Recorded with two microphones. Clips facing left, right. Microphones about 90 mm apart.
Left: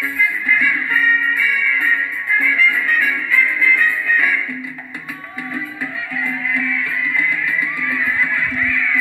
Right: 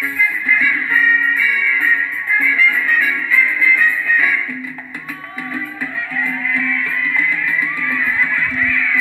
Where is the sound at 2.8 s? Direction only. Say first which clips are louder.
Right 1 dB; 50° left (ahead or behind).